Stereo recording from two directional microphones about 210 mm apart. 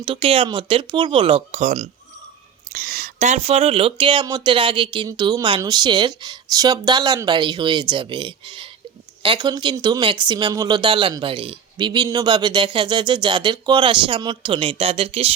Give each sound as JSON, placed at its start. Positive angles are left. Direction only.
{"t": 0.0, "sound": "speech", "side_deg": -25}